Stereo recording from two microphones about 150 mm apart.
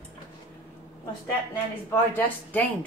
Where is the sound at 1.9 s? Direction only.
15° left (ahead or behind).